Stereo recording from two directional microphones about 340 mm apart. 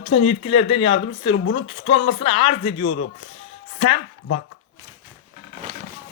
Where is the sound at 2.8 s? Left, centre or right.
Left.